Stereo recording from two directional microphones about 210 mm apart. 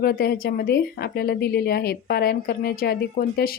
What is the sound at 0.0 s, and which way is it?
A woman's voice, 50° left (ahead or behind).